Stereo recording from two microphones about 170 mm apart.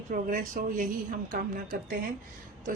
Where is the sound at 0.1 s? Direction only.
50° right (ahead or behind).